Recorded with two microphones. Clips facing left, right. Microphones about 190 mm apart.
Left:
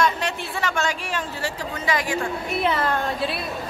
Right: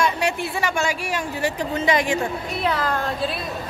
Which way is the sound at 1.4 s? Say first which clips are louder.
Right 7 dB; 20° right (ahead or behind).